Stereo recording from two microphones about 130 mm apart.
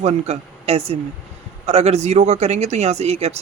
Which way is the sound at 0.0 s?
55° right (ahead or behind).